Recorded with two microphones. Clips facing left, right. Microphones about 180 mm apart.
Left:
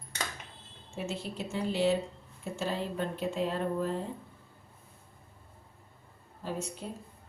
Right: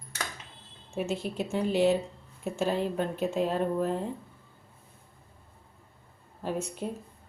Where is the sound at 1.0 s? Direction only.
55° right (ahead or behind).